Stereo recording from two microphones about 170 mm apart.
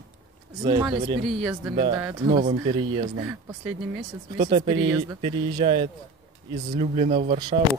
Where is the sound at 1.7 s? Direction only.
30° right (ahead or behind).